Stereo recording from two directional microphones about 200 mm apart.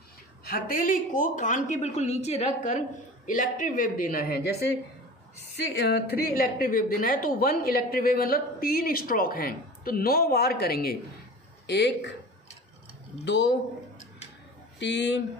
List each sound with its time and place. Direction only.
0.5 s a woman's voice: 45° left (ahead or behind)
5.8 s a woman's voice: 55° left (ahead or behind)
13.2 s speech: 60° left (ahead or behind)
14.8 s speech: 60° left (ahead or behind)